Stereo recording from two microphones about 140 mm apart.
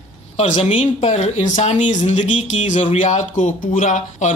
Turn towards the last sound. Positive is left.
turn(degrees=65)  # may be behind; listen again after turning